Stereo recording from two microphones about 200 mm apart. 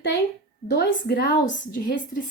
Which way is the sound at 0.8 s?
50° left (ahead or behind).